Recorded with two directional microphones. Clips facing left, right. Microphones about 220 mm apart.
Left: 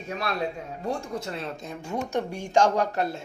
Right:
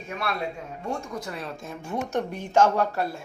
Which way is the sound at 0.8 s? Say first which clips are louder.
Left 2 dB; 30° left (ahead or behind).